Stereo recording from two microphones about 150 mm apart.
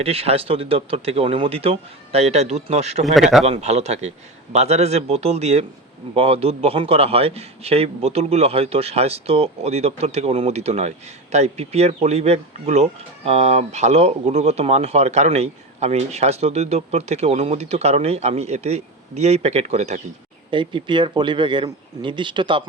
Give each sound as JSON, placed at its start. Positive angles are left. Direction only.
{"t": 0.0, "sound": "speech", "side_deg": -40}
{"t": 3.0, "sound": "speech", "side_deg": 0}
{"t": 3.4, "sound": "a man's voice", "side_deg": -45}
{"t": 20.5, "sound": "speech", "side_deg": -35}